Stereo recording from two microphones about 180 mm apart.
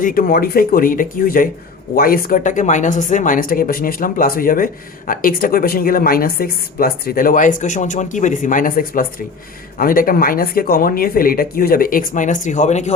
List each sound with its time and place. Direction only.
0.0 s speech: 50° left (ahead or behind)